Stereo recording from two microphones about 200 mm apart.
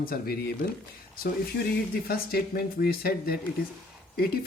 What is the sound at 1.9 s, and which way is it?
Speech, 50° left (ahead or behind).